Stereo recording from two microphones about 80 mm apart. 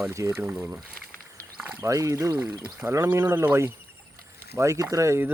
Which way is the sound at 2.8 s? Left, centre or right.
Right.